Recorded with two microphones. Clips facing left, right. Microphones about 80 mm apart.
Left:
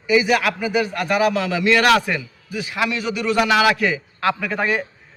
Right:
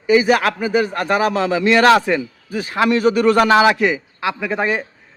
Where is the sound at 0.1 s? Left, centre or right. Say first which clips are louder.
Right 3 dB; right.